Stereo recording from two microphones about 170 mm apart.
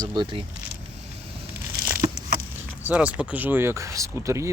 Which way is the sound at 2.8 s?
10° right (ahead or behind).